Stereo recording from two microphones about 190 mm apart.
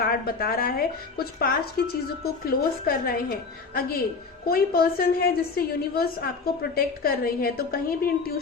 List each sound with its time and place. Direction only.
0.0 s a woman's voice: 50° left (ahead or behind)